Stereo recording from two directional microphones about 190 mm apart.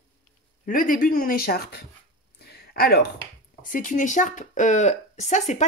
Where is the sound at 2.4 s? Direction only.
55° left (ahead or behind).